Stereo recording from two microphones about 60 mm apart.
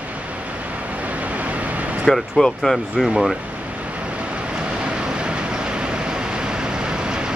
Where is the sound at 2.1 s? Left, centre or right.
Centre.